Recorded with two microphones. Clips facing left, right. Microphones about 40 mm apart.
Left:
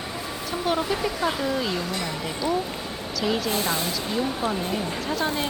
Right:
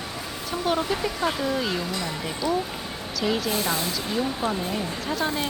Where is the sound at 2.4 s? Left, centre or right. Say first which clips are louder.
Even; left.